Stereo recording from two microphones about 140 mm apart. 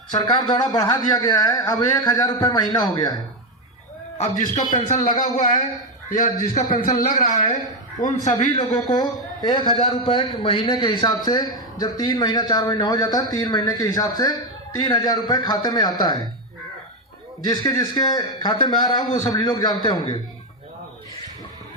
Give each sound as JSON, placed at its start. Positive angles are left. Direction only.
{"t": 0.2, "sound": "a man's voice", "side_deg": 30}
{"t": 4.7, "sound": "a man's voice", "side_deg": 65}
{"t": 8.5, "sound": "a man's voice", "side_deg": 30}
{"t": 17.5, "sound": "a man's voice", "side_deg": 30}